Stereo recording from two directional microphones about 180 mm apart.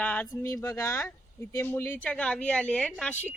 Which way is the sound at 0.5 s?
15° left (ahead or behind).